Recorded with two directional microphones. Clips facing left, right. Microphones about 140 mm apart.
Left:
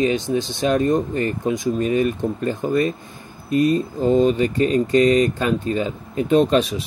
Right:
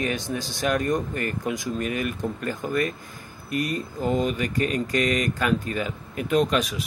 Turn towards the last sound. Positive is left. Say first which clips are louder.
# left 6 dB
turn(degrees=30)  # may be behind; listen again after turning